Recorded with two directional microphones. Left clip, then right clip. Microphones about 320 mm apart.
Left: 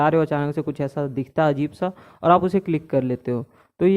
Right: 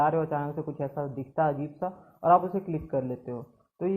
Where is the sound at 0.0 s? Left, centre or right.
Left.